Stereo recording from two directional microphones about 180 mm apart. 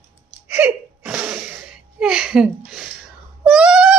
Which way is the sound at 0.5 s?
5° right (ahead or behind).